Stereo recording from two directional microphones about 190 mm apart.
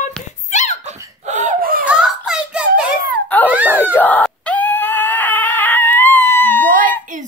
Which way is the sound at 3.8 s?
10° left (ahead or behind).